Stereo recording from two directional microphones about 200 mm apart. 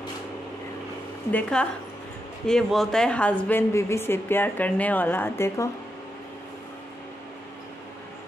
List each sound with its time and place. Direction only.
1.3 s a woman's voice: 5° left (ahead or behind)